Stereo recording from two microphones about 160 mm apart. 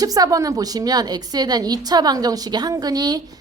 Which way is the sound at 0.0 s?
20° right (ahead or behind).